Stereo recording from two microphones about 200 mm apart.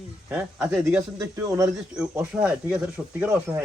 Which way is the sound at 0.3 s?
10° right (ahead or behind).